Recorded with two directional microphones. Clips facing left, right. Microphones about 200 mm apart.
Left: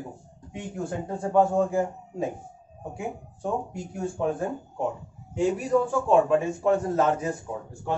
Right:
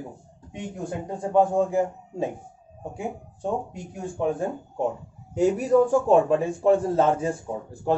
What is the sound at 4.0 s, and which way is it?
Speech, 15° right (ahead or behind).